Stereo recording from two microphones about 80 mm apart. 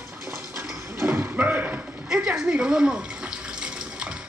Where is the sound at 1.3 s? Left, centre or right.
Right.